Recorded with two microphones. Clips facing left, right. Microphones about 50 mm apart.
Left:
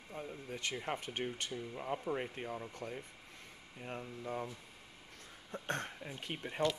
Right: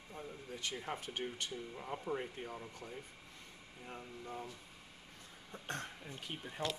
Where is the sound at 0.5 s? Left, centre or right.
Left.